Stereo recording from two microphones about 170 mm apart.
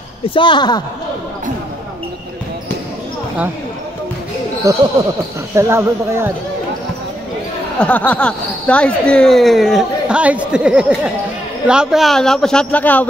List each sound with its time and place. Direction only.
0.3 s a woman's voice: 30° left (ahead or behind)
4.6 s speech: 20° right (ahead or behind)
7.8 s speech: 10° left (ahead or behind)